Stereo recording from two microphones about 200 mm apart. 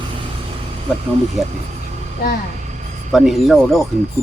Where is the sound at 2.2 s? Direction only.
50° left (ahead or behind).